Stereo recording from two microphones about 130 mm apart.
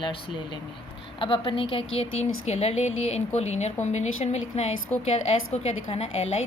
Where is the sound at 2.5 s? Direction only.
55° left (ahead or behind).